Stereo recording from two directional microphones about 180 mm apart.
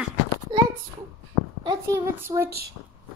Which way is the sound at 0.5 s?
25° right (ahead or behind).